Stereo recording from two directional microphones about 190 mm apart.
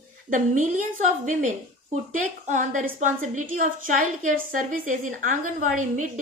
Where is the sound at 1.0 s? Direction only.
40° right (ahead or behind).